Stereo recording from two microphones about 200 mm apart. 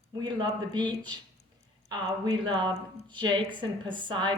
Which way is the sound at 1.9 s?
20° right (ahead or behind).